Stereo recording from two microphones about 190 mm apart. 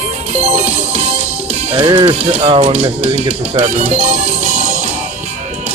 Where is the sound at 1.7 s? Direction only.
25° right (ahead or behind).